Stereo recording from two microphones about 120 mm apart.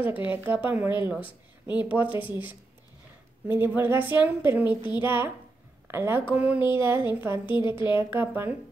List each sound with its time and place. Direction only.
0.0 s a woman's voice: 15° right (ahead or behind)
3.4 s a woman's voice: 15° right (ahead or behind)
7.4 s a woman's voice: 40° left (ahead or behind)
8.0 s a woman's voice: 20° right (ahead or behind)